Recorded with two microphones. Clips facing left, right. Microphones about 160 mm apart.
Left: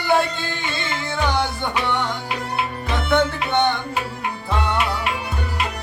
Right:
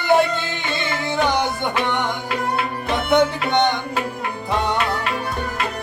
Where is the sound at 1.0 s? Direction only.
15° right (ahead or behind).